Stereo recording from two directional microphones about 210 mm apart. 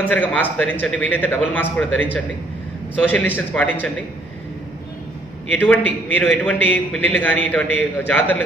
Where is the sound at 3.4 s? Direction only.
5° left (ahead or behind).